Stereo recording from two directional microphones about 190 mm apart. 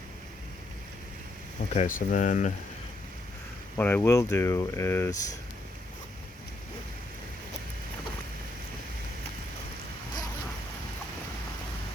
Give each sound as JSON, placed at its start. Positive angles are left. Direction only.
{"t": 1.7, "sound": "speech", "side_deg": 40}
{"t": 3.8, "sound": "speech", "side_deg": 10}